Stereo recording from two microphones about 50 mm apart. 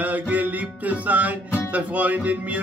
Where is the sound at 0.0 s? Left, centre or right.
Right.